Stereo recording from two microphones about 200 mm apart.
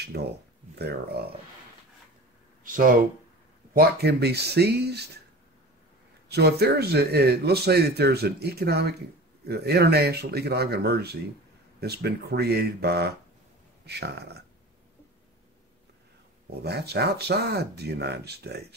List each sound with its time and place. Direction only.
0.1 s speech: 55° right (ahead or behind)
2.6 s speech: 45° right (ahead or behind)
3.7 s speech: 55° right (ahead or behind)
6.2 s speech: 55° right (ahead or behind)
16.6 s speech: 55° right (ahead or behind)